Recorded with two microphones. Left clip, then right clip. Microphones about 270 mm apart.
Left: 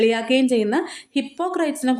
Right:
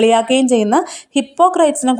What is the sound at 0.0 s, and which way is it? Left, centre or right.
A woman's voice, right.